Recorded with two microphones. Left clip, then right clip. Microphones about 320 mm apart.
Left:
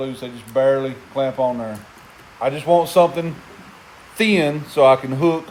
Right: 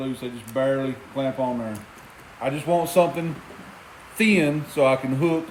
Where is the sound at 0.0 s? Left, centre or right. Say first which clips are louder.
Left 3 dB; left.